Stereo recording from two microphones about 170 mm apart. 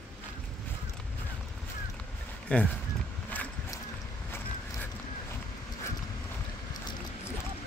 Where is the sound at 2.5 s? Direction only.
10° left (ahead or behind).